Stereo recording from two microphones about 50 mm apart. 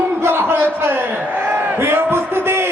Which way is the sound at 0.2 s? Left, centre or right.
Right.